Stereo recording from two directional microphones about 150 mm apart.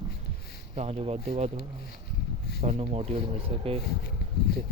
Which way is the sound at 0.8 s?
40° right (ahead or behind).